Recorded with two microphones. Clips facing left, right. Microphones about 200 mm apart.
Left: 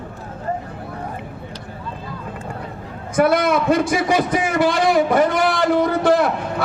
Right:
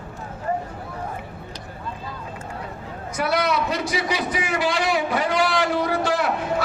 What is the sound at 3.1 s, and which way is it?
A man's voice, 50° left (ahead or behind).